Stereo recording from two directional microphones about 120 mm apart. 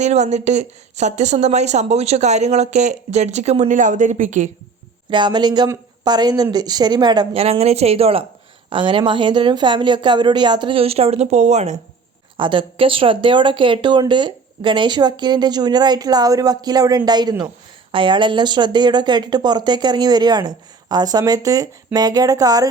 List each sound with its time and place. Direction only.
0.0 s a woman's voice: 70° right (ahead or behind); by 4.4 s 90° right
5.1 s speech: 40° right (ahead or behind)
7.3 s speech: 55° right (ahead or behind)
8.7 s speech: 45° right (ahead or behind); by 11.8 s 70° right (ahead or behind)
12.4 s speech: 45° right (ahead or behind)